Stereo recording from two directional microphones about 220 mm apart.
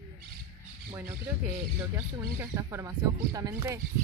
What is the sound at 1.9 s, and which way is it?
Speech, 15° right (ahead or behind).